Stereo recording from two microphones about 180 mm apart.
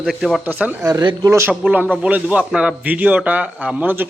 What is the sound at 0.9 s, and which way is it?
A man's voice, 20° right (ahead or behind).